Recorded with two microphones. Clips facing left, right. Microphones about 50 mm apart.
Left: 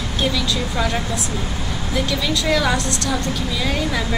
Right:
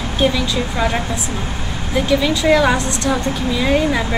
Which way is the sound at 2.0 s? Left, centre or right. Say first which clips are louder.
Right 8 dB; right.